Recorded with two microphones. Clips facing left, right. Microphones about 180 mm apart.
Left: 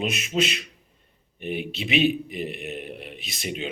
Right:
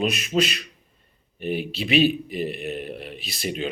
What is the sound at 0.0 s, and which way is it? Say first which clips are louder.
A man's voice: right 3 dB; 20° left (ahead or behind).